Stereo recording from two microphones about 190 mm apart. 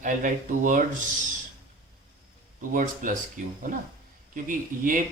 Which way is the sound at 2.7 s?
45° right (ahead or behind).